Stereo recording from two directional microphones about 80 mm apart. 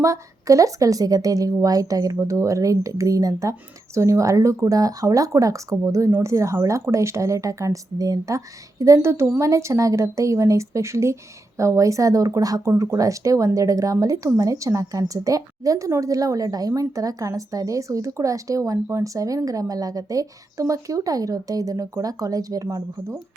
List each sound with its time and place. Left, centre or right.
0.0 s speech: right